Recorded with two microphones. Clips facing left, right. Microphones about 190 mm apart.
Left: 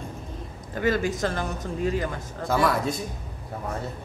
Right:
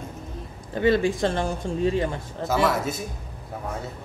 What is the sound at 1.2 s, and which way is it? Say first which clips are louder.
Speech: right 3 dB; 30° right (ahead or behind).